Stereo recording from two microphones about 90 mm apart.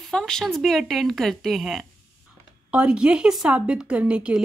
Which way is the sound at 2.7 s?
10° right (ahead or behind).